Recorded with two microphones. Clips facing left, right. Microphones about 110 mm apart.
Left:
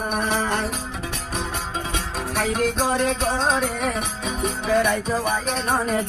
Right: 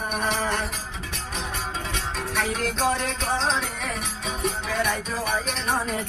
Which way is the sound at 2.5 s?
55° left (ahead or behind).